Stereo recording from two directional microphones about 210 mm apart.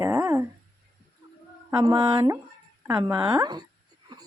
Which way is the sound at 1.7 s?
20° right (ahead or behind).